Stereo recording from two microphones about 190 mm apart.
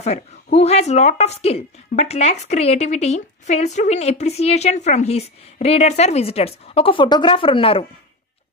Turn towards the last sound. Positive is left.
turn(degrees=30)  # may be behind; listen again after turning